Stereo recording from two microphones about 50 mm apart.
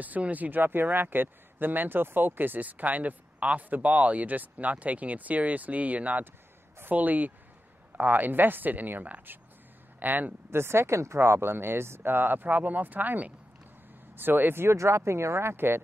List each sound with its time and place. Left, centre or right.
0.0 s speech: right
10.5 s speech: right
14.8 s speech: right